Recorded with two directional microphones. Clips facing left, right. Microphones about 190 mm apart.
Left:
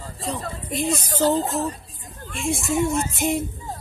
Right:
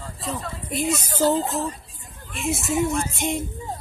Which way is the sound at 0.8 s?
40° left (ahead or behind).